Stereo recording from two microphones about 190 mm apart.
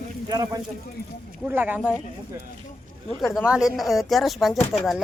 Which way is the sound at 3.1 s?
Centre (ahead or behind).